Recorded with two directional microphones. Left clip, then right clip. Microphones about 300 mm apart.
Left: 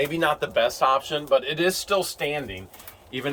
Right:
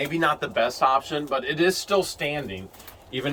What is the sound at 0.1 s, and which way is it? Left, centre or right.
Speech, left.